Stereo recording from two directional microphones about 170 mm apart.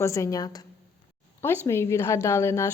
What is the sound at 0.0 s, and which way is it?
Speech, 20° left (ahead or behind).